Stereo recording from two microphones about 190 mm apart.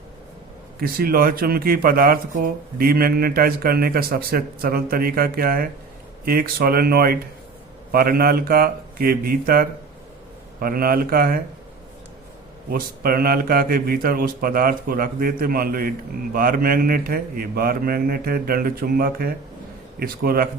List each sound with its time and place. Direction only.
0.8 s speech: 50° right (ahead or behind)
12.7 s speech: 50° right (ahead or behind)